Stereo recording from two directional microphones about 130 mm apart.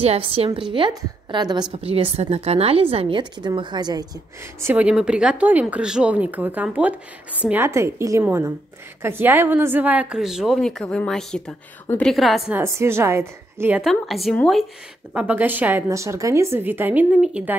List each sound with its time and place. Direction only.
0.0 s a woman's voice: 50° right (ahead or behind)
0.5 s a woman's voice: 35° right (ahead or behind)
1.8 s a woman's voice: 50° right (ahead or behind); by 4.1 s 30° right (ahead or behind)
4.6 s a woman's voice: 20° right (ahead or behind)
4.8 s a woman's voice: 5° right (ahead or behind)
12.5 s a woman's voice: 20° right (ahead or behind)
13.7 s a woman's voice: centre (ahead or behind)
15.1 s speech: 15° right (ahead or behind)